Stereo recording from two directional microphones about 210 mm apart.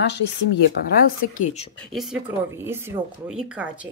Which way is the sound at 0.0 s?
55° left (ahead or behind).